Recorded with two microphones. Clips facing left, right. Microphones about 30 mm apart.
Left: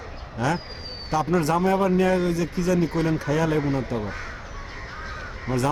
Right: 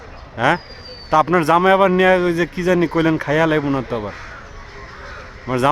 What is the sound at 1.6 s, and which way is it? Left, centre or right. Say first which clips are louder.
Speech: right 8 dB; right.